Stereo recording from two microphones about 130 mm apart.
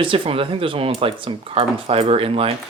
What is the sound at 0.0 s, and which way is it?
Speech, 45° right (ahead or behind).